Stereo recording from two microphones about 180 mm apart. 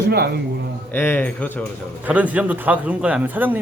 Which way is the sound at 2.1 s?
10° right (ahead or behind).